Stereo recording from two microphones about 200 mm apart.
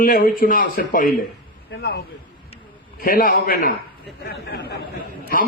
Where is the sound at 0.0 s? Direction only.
45° left (ahead or behind).